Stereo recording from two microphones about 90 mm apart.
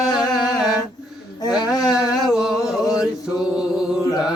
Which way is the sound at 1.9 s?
5° right (ahead or behind).